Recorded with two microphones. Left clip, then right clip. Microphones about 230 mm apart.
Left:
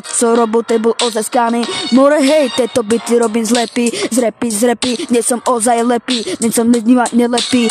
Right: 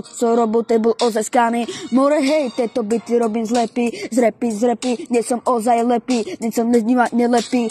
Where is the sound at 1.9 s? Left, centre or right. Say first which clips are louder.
Left 6 dB; left.